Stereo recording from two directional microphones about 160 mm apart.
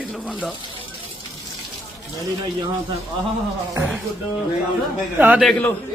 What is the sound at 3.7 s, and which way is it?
Speech, 10° right (ahead or behind).